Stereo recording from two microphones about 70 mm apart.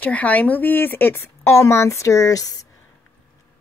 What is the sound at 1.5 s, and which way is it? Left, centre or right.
Speech, left.